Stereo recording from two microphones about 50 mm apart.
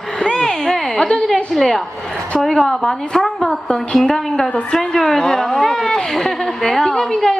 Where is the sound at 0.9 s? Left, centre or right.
Centre.